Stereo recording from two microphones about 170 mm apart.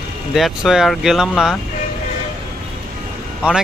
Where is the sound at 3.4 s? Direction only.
5° right (ahead or behind).